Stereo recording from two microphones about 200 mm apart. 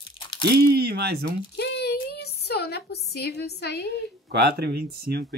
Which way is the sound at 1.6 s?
55° left (ahead or behind).